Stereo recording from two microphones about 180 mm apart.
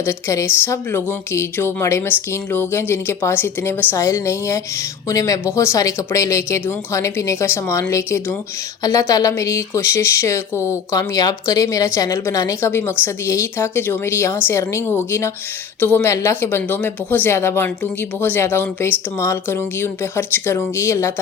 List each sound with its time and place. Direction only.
0.0 s speech: 15° left (ahead or behind)